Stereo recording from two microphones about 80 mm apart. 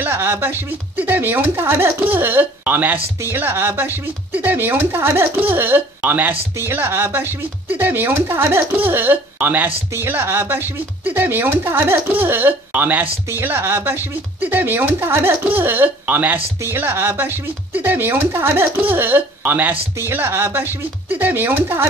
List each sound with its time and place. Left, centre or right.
0.0 s speech: right